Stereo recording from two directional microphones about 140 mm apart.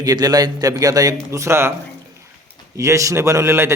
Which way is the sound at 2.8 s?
20° right (ahead or behind).